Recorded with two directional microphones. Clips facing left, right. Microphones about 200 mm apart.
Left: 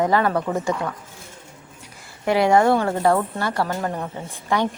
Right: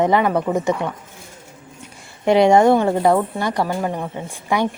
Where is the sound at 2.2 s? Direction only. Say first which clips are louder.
Right 4 dB; 20° right (ahead or behind).